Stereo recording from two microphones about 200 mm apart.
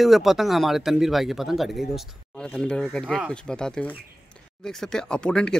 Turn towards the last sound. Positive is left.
turn(degrees=5)  # may be behind; listen again after turning